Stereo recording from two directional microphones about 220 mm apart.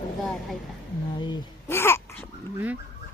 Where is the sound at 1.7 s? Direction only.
10° left (ahead or behind).